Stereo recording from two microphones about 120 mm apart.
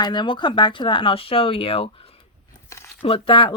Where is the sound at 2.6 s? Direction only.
25° left (ahead or behind).